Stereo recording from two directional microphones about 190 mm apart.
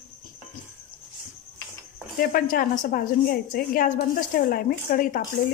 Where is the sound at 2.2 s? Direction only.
45° left (ahead or behind).